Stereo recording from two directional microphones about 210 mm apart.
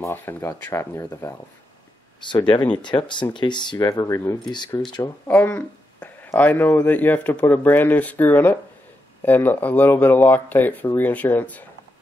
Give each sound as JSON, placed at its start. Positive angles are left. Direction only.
{"t": 0.0, "sound": "speech", "side_deg": 10}
{"t": 5.3, "sound": "speech", "side_deg": 5}